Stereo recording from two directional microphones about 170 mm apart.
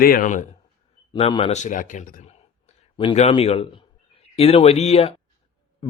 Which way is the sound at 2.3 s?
40° left (ahead or behind).